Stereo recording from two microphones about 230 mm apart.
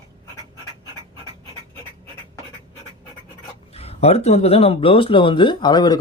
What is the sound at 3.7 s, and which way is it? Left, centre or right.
Speech, left.